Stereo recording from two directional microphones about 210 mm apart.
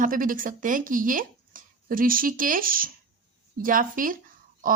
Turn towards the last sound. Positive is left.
turn(degrees=-40)  # may be behind; listen again after turning